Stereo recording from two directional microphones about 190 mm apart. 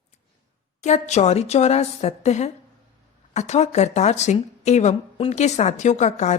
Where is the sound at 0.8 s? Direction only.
35° left (ahead or behind).